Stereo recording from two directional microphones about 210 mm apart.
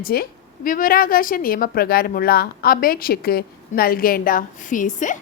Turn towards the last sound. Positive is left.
turn(degrees=35)  # may be behind; listen again after turning